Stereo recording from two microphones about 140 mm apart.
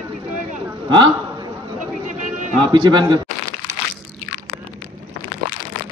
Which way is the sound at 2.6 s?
35° right (ahead or behind).